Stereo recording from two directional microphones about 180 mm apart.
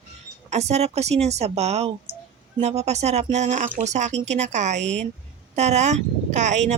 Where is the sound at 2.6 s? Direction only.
35° right (ahead or behind).